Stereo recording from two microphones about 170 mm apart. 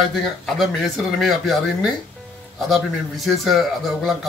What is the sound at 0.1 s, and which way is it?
Speech, centre (ahead or behind).